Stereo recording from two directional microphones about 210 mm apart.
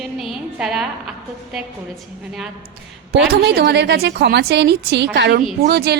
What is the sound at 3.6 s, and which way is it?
A woman's voice, 55° right (ahead or behind).